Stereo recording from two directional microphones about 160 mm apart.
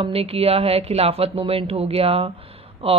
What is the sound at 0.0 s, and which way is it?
Speech, 35° right (ahead or behind).